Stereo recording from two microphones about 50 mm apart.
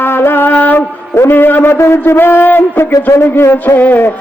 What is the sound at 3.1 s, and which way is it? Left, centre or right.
Speech, left.